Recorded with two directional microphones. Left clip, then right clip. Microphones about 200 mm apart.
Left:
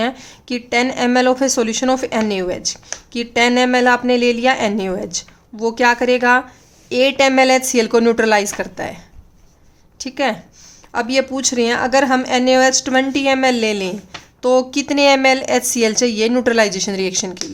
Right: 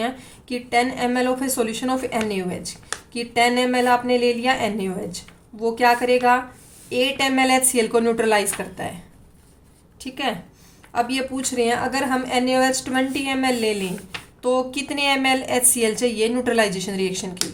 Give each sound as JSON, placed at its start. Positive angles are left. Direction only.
{"t": 0.0, "sound": "a woman's voice", "side_deg": 50}
{"t": 10.0, "sound": "a woman's voice", "side_deg": 45}